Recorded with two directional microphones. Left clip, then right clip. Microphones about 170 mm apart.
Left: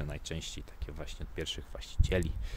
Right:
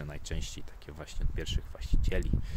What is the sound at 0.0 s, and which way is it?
Speech, 10° left (ahead or behind).